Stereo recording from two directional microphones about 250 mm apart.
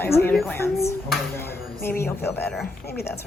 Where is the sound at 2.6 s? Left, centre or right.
Left.